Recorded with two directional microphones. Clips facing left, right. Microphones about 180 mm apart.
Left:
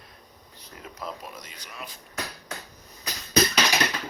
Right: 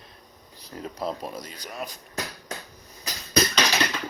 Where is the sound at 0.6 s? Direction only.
35° right (ahead or behind).